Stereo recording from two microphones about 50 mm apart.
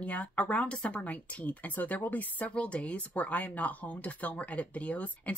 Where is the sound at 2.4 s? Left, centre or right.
Left.